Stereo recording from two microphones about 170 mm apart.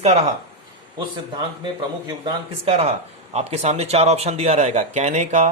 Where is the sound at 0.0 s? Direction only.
40° right (ahead or behind).